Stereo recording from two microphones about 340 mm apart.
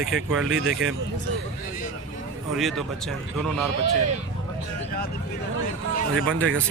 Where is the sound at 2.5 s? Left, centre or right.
Centre.